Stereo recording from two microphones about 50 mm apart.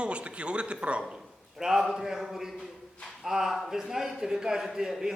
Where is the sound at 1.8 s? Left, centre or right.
Centre.